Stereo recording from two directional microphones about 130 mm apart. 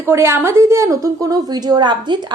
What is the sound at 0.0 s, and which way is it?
A woman's voice, 20° right (ahead or behind).